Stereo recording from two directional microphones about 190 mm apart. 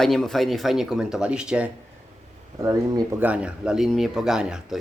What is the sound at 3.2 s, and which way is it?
A man's voice, 5° right (ahead or behind).